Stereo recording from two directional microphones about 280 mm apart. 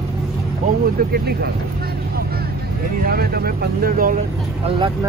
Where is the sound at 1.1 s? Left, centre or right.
Right.